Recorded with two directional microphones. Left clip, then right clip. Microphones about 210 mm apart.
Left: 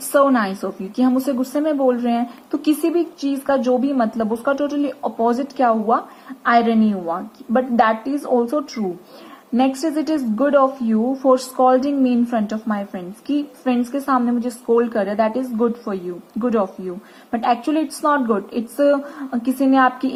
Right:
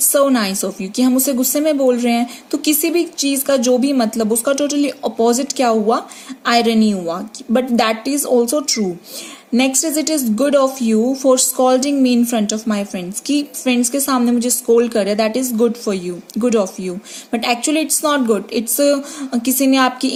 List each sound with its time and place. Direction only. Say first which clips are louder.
0.1 s a woman's voice: even; 55° right (ahead or behind)